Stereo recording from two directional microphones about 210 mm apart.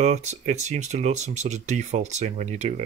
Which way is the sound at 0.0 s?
35° right (ahead or behind).